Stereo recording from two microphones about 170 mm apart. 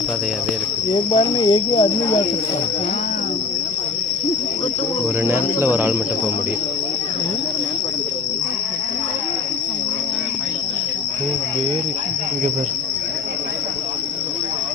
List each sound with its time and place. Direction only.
0.9 s speech: 30° left (ahead or behind)
5.2 s cricket: 10° right (ahead or behind)